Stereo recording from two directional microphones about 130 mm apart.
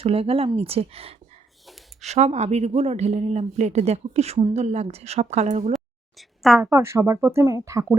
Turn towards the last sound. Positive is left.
turn(degrees=-25)  # may be behind; listen again after turning